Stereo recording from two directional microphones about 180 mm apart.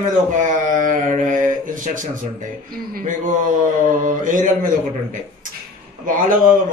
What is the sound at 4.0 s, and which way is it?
Speech, 45° right (ahead or behind).